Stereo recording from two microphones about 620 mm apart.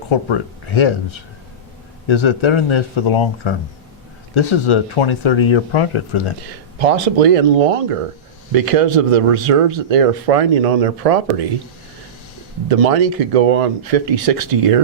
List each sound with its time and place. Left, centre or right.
0.1 s speech: left
6.7 s speech: right
12.6 s speech: right